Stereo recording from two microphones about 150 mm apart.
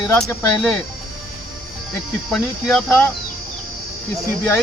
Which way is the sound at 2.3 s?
5° left (ahead or behind).